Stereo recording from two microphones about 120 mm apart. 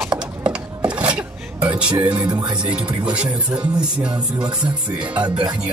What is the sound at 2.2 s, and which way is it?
Music, 35° right (ahead or behind).